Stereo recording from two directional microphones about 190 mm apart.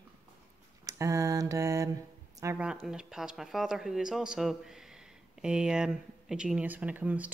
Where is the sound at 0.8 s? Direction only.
15° right (ahead or behind).